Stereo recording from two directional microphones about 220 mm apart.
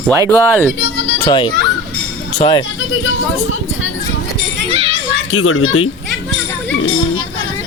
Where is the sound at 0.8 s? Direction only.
50° left (ahead or behind).